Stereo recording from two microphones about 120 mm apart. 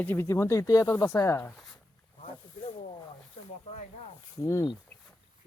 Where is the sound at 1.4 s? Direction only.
5° left (ahead or behind).